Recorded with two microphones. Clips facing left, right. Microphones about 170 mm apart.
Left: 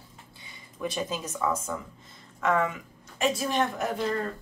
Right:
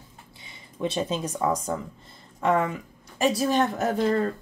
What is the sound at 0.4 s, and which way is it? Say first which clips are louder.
Speech: right 4 dB; 25° right (ahead or behind).